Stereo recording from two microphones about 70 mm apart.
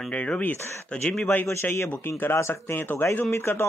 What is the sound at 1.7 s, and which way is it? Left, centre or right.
Speech, left.